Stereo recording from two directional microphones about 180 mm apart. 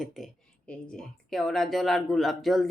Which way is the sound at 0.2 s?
Centre (ahead or behind).